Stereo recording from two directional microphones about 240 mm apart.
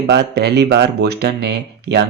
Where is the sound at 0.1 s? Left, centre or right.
Right.